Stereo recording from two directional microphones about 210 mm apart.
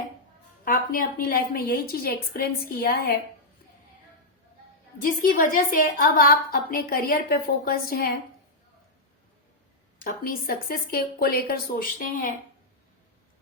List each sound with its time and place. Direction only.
0.6 s a woman's voice: 40° left (ahead or behind)
5.0 s a woman's voice: 40° left (ahead or behind)
10.0 s a woman's voice: 45° left (ahead or behind)